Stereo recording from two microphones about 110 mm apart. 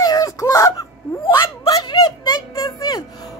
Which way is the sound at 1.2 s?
50° left (ahead or behind).